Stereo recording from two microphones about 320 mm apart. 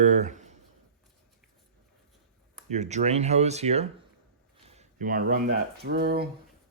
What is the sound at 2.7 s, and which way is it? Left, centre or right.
Speech, right.